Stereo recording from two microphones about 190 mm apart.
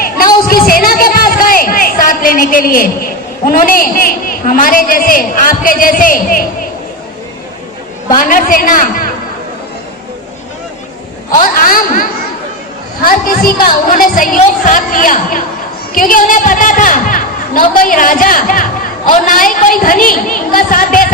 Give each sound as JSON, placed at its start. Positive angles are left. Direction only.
{"t": 0.4, "sound": "music", "side_deg": 50}
{"t": 3.4, "sound": "a woman's voice", "side_deg": 50}
{"t": 8.1, "sound": "a woman's voice", "side_deg": 45}
{"t": 11.3, "sound": "a woman's voice", "side_deg": 45}
{"t": 13.1, "sound": "a woman's voice", "side_deg": 50}